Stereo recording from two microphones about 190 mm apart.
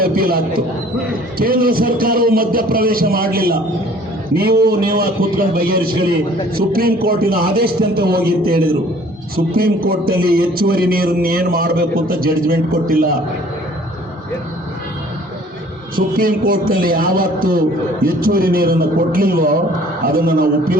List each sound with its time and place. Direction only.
0.0 s a man's voice: 50° right (ahead or behind)
16.0 s a man's voice: 50° right (ahead or behind)